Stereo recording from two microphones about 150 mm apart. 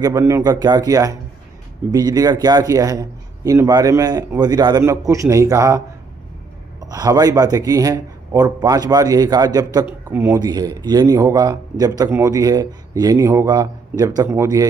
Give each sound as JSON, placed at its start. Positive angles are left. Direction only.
{"t": 0.0, "sound": "a man's voice", "side_deg": -20}
{"t": 6.8, "sound": "a man's voice", "side_deg": -25}
{"t": 10.1, "sound": "speech", "side_deg": -15}
{"t": 10.4, "sound": "a man's voice", "side_deg": -25}